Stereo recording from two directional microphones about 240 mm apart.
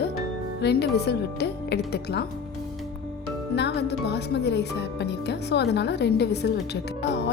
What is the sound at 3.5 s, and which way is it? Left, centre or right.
Speech, left.